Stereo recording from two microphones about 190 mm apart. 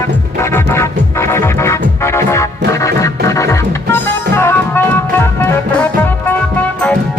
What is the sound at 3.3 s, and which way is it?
Music, 15° left (ahead or behind).